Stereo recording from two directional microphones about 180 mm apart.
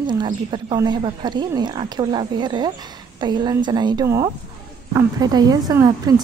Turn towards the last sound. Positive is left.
turn(degrees=-20)  # may be behind; listen again after turning